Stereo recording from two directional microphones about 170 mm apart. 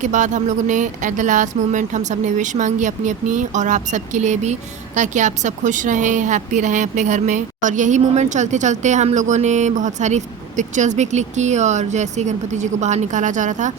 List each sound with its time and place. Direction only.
0.0 s speech: 45° right (ahead or behind)